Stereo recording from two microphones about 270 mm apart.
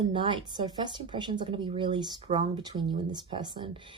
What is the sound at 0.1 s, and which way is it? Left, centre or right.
Speech, centre.